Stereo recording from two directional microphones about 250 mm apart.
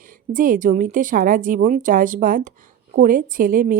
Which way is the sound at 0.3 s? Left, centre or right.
Right.